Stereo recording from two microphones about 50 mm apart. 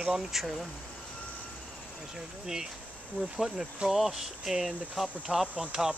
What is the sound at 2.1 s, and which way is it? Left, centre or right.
Speech, centre.